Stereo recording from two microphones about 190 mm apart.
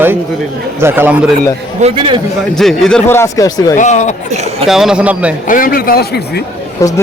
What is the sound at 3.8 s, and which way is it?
Speech, 40° left (ahead or behind).